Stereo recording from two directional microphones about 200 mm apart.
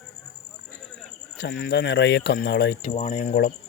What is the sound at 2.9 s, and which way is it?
Speech, 30° left (ahead or behind).